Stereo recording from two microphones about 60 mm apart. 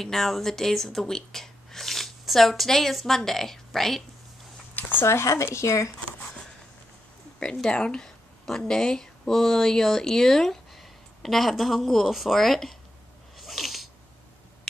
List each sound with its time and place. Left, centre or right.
0.0 s speech: centre
4.7 s a sound: left
5.0 s speech: left
7.7 s speech: centre
13.4 s sneeze: centre